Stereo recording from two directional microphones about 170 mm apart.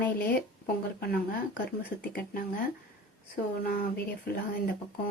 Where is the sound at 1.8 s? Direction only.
65° left (ahead or behind).